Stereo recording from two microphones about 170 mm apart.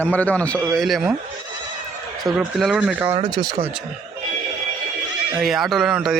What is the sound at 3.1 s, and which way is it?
Speech, 30° right (ahead or behind).